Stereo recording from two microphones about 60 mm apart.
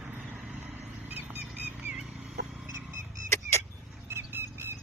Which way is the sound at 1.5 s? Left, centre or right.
Right.